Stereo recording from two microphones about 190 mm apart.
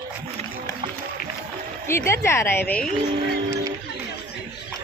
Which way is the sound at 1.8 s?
15° left (ahead or behind).